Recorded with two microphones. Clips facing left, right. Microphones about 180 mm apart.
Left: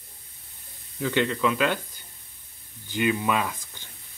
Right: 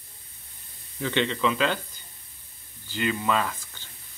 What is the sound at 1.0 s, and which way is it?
Speech, 5° left (ahead or behind).